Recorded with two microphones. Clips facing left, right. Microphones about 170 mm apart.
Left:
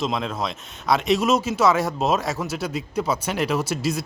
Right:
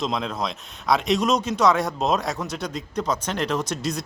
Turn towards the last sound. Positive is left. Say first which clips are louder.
# left 2 dB
turn(degrees=5)  # may be behind; listen again after turning